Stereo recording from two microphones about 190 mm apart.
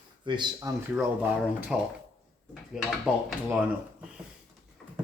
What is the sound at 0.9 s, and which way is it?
Speech, 5° right (ahead or behind).